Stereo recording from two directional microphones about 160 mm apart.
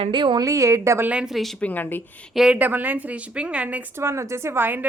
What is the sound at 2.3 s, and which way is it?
A woman's voice, 5° right (ahead or behind).